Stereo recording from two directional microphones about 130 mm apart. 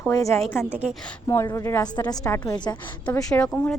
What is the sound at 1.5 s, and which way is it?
Speech, 15° left (ahead or behind).